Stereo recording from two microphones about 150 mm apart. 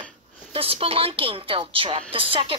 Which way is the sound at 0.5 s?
40° right (ahead or behind).